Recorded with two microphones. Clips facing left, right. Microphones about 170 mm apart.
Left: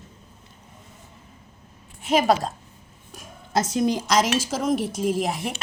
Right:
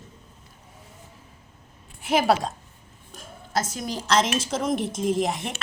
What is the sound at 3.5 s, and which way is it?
Speech, 20° left (ahead or behind).